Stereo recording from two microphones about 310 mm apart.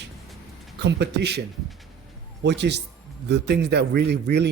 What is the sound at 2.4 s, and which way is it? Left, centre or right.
Speech, right.